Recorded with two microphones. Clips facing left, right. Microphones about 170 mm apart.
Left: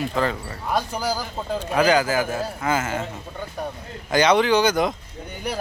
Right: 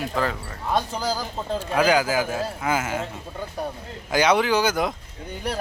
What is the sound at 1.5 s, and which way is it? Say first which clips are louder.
Speech: left 1 dB; 10° right (ahead or behind).